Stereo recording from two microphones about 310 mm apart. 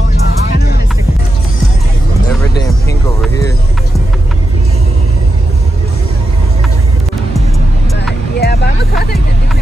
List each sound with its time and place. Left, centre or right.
8.4 s vehicle: left